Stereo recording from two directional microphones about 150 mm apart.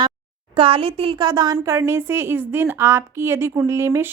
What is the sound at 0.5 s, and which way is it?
A woman's voice, 40° right (ahead or behind).